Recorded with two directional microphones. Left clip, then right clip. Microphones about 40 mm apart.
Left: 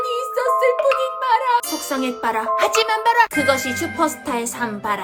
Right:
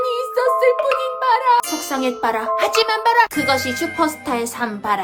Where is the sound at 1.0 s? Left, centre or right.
Right.